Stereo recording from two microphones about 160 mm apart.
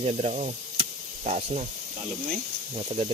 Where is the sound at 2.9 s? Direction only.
40° right (ahead or behind).